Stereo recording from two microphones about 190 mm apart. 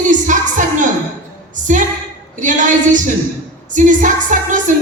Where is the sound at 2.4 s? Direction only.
40° right (ahead or behind).